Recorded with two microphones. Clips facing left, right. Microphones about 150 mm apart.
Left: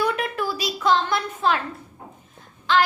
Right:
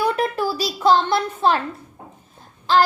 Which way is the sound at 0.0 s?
35° right (ahead or behind).